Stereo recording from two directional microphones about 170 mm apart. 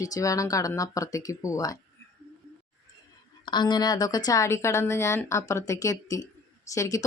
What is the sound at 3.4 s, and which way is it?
Speech, 25° left (ahead or behind).